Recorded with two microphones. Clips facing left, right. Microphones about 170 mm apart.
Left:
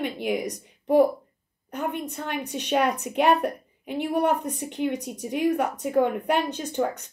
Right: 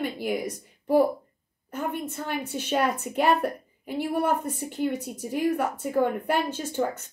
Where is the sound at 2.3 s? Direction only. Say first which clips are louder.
Even; 15° left (ahead or behind).